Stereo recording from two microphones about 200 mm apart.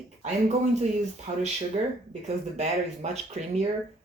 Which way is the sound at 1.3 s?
30° right (ahead or behind).